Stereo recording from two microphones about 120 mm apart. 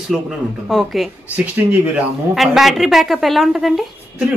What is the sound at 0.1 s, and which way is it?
Speech, centre (ahead or behind).